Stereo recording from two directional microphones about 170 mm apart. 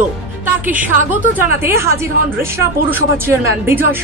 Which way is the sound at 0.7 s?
10° right (ahead or behind).